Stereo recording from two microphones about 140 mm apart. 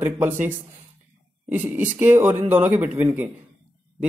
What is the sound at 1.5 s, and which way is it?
Speech, 15° right (ahead or behind).